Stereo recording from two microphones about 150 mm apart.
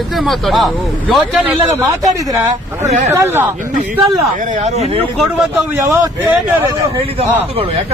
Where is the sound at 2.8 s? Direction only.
50° right (ahead or behind).